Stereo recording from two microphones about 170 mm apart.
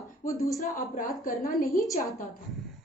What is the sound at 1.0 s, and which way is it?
Speech, 55° left (ahead or behind).